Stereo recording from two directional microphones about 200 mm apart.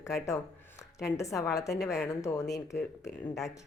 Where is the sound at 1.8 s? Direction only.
5° right (ahead or behind).